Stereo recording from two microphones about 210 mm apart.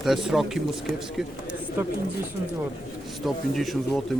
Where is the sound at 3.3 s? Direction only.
Centre (ahead or behind).